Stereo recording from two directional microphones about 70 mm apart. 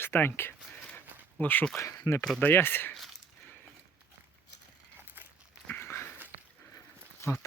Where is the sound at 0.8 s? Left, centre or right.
Left.